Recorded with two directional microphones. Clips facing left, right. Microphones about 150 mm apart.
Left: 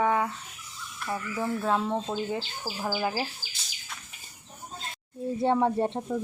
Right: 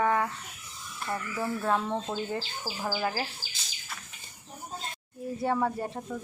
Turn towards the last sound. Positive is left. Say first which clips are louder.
# left 5 dB
turn(degrees=25)  # may be behind; listen again after turning